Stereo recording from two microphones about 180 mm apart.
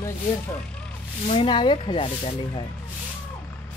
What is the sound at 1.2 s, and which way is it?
Speech, 30° left (ahead or behind).